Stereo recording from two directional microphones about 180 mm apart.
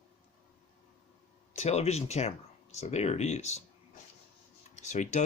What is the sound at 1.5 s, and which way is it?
Speech, 35° left (ahead or behind).